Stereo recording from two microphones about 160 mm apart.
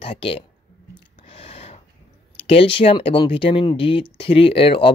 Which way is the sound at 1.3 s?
40° left (ahead or behind).